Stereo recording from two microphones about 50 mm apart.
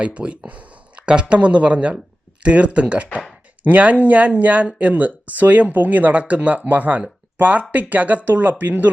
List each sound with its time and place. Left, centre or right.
0.0 s speech: right